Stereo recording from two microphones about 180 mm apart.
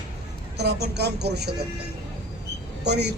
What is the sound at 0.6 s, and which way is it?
Speech, 65° right (ahead or behind).